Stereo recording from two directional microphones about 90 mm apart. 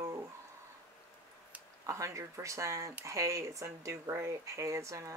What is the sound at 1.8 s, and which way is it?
Speech, 35° right (ahead or behind).